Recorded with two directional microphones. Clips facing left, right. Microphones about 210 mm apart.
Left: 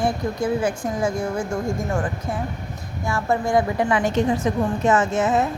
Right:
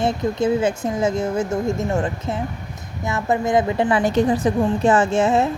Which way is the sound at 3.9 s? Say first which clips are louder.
Right 2 dB; 35° right (ahead or behind).